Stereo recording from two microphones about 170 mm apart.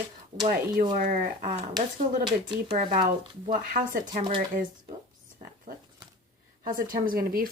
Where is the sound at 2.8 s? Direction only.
50° right (ahead or behind).